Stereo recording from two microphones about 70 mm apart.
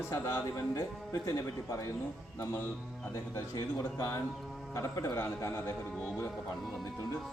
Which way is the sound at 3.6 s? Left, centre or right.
Left.